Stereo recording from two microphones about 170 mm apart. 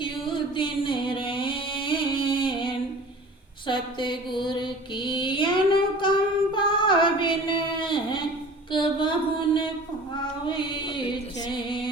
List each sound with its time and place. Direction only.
0.0 s music: 30° left (ahead or behind)
3.7 s mantra: 30° left (ahead or behind)
10.4 s music: 30° left (ahead or behind)